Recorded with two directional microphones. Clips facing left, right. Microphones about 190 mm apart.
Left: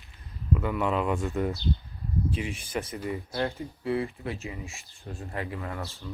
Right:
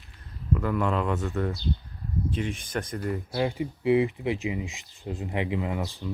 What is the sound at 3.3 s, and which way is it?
Speech, 5° right (ahead or behind).